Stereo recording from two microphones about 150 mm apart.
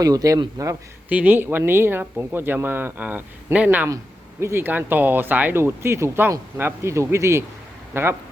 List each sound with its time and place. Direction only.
0.0 s speech: 25° right (ahead or behind)
1.1 s speech: 10° right (ahead or behind)
3.8 s speech: 20° right (ahead or behind)